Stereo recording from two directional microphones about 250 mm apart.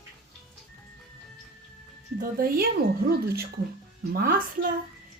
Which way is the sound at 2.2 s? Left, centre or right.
Right.